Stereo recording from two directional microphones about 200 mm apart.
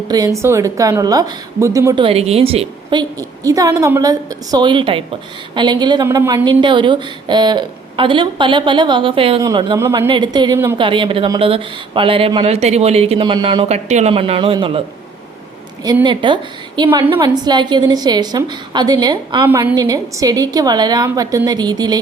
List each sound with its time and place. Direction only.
0.1 s a woman's voice: 15° right (ahead or behind)
15.8 s a woman's voice: 20° right (ahead or behind)
19.5 s a woman's voice: 10° right (ahead or behind)